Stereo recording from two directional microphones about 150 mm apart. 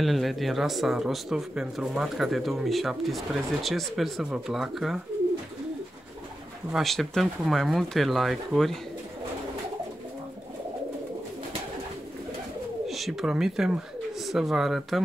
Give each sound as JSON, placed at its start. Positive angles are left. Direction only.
{"t": 0.0, "sound": "speech", "side_deg": 0}
{"t": 6.7, "sound": "speech", "side_deg": 0}
{"t": 12.8, "sound": "speech", "side_deg": 0}